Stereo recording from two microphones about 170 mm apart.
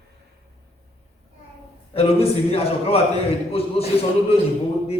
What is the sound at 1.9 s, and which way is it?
Speech, 35° left (ahead or behind).